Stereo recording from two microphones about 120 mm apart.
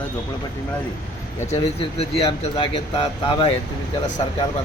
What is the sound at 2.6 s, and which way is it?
Speech, 40° left (ahead or behind).